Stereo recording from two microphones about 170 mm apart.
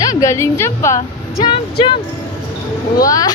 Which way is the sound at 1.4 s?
30° left (ahead or behind).